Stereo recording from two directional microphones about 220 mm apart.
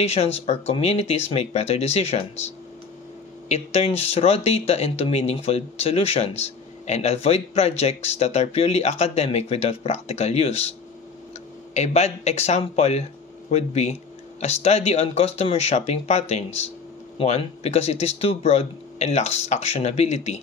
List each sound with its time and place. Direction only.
0.0 s speech: 25° left (ahead or behind)
11.7 s speech: 30° left (ahead or behind)